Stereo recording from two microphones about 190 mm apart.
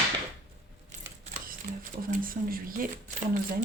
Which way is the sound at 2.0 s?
45° right (ahead or behind).